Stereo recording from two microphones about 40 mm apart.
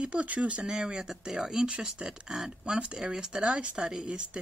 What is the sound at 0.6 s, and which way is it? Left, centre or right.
Speech, centre.